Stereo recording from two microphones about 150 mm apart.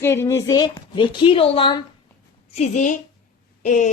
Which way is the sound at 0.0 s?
15° left (ahead or behind).